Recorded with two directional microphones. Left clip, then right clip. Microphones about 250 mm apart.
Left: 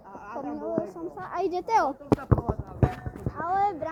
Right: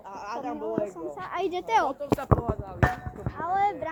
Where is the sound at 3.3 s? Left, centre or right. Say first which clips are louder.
Even; centre.